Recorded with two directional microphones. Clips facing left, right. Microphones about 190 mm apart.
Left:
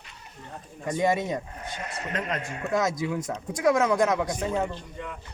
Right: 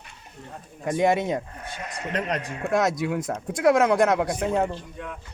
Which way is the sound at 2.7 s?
65° right (ahead or behind).